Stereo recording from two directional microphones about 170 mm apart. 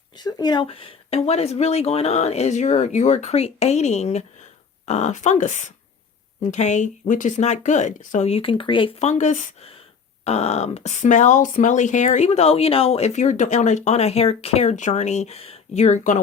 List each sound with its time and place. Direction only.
0.2 s speech: 25° left (ahead or behind); by 16.2 s 45° left (ahead or behind)